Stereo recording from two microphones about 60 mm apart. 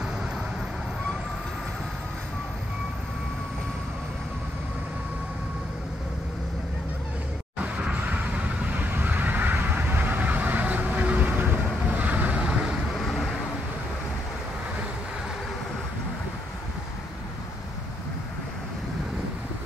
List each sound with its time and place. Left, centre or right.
7.6 s a sound: right
11.9 s vehicle: right
13.0 s vehicle: centre